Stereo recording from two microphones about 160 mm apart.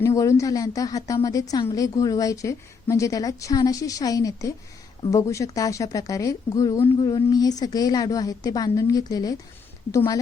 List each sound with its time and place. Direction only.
0.0 s a woman's voice: 20° left (ahead or behind)